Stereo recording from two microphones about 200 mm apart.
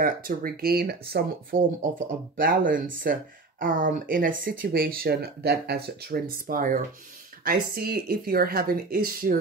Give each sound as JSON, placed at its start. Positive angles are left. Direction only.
{"t": 0.0, "sound": "speech", "side_deg": -45}